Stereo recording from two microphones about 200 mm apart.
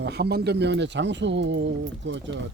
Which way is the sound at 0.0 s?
55° right (ahead or behind).